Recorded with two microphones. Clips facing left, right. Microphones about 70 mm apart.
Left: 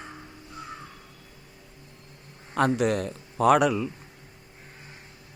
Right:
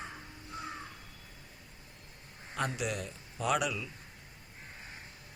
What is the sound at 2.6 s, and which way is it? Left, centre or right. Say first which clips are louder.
Speech: left 12 dB; left.